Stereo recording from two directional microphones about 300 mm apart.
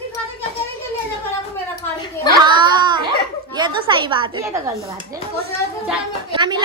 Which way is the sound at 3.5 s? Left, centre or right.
Centre.